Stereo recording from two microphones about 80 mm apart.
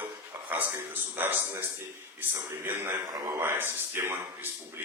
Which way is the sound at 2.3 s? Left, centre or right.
Right.